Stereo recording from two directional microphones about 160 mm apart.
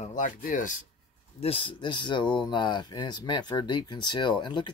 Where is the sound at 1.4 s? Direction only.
35° left (ahead or behind).